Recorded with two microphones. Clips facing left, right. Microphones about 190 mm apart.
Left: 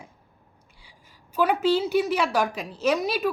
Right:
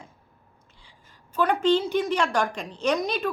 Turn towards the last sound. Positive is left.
turn(degrees=5)  # may be behind; listen again after turning